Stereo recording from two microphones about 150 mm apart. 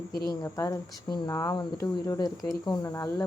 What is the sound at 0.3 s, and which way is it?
A woman's voice, 20° left (ahead or behind).